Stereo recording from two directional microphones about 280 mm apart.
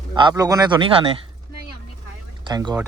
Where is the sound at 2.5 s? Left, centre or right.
Centre.